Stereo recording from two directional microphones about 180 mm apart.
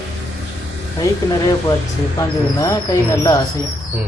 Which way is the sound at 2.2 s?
15° left (ahead or behind).